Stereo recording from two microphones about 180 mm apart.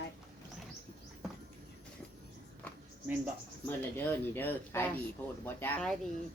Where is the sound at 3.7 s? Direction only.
10° left (ahead or behind).